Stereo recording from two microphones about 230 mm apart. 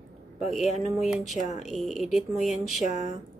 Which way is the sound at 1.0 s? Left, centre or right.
Centre.